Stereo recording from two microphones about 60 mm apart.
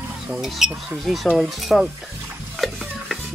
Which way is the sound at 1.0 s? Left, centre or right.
Centre.